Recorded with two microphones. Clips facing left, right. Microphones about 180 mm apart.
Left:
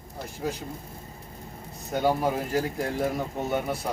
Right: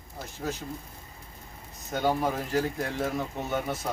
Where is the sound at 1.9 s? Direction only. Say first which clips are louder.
Left 2 dB; 10° left (ahead or behind).